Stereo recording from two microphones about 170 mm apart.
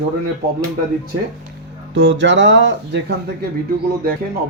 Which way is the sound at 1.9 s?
90° right.